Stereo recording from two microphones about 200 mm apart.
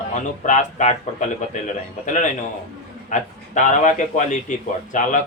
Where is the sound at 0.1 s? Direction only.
35° left (ahead or behind).